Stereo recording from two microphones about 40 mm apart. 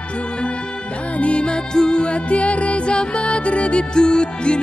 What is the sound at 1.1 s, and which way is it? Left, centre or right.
Music, left.